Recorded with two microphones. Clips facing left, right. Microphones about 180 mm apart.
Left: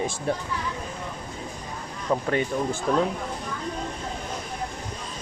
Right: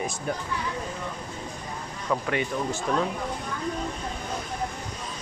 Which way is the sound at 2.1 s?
35° left (ahead or behind).